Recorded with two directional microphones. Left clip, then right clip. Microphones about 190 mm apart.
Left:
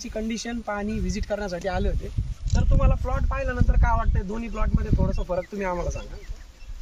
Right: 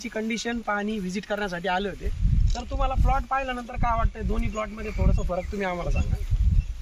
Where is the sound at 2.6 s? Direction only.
25° left (ahead or behind).